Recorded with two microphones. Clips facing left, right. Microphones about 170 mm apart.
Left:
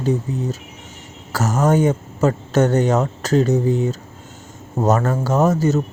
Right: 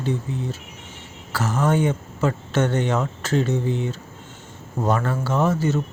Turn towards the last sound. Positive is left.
turn(degrees=40)  # may be behind; listen again after turning